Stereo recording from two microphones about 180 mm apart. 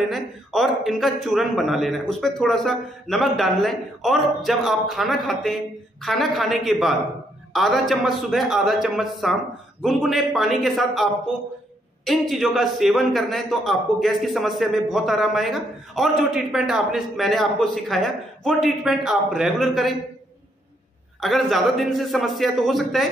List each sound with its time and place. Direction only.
0.1 s a man's voice: centre (ahead or behind)
21.2 s a man's voice: centre (ahead or behind)